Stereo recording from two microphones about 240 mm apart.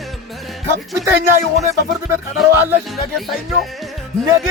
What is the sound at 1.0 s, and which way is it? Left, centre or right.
Speech, centre.